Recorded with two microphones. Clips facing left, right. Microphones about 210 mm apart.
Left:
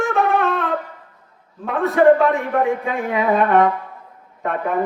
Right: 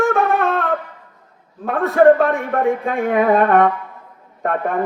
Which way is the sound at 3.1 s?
50° right (ahead or behind).